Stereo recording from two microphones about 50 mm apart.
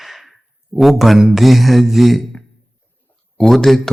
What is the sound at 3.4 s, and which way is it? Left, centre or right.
Speech, centre.